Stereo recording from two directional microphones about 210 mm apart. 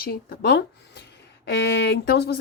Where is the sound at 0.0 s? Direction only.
45° left (ahead or behind).